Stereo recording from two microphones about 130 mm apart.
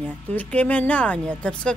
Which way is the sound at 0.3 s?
10° left (ahead or behind).